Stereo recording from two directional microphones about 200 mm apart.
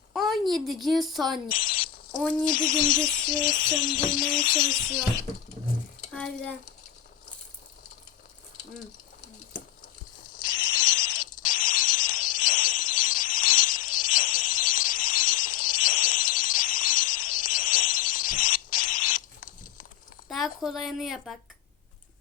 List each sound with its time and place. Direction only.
0.1 s a woman's voice: centre (ahead or behind)
1.5 s speech: 45° left (ahead or behind)
2.1 s speech: 5° left (ahead or behind)
2.5 s a sound: 40° left (ahead or behind)
6.1 s speech: 5° left (ahead or behind)
10.3 s cricket: 45° left (ahead or behind)
20.2 s a woman's voice: centre (ahead or behind)